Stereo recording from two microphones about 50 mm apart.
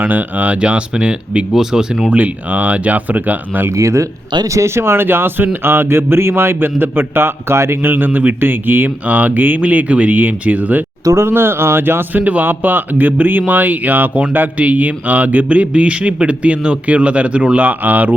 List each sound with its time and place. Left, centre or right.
0.0 s speech: right
0.6 s speech: right
2.0 s speech: right
3.8 s speech: right
4.5 s a man's voice: right
7.9 s a man's voice: right
9.0 s speech: right
11.0 s speech: right
11.3 s a man's voice: right
12.2 s speech: right